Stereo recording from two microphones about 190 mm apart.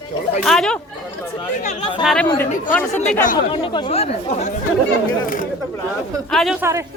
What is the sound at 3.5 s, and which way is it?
Speech, 25° left (ahead or behind).